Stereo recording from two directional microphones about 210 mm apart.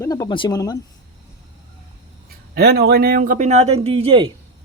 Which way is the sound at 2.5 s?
50° right (ahead or behind).